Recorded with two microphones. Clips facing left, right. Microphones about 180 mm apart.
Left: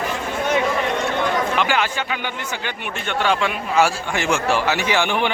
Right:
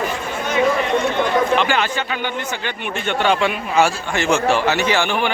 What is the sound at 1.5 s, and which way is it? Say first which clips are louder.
A man's voice: right 2 dB; 10° left (ahead or behind).